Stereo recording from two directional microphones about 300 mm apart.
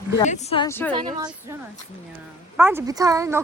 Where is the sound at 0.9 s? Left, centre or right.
Centre.